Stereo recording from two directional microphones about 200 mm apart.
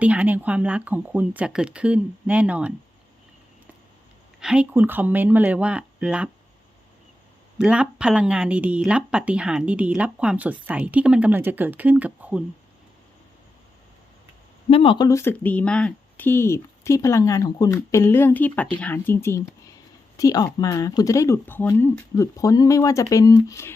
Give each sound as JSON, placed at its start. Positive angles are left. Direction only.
{"t": 0.0, "sound": "speech", "side_deg": -5}
{"t": 4.4, "sound": "speech", "side_deg": -5}
{"t": 7.6, "sound": "speech", "side_deg": -5}
{"t": 14.7, "sound": "speech", "side_deg": 25}